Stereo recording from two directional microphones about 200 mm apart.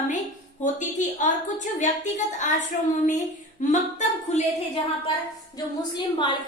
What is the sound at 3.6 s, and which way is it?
A woman's voice, 35° left (ahead or behind).